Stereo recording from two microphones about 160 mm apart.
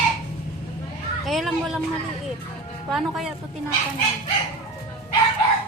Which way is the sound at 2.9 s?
Centre (ahead or behind).